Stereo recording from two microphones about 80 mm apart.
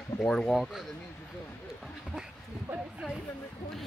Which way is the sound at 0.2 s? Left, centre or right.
Centre.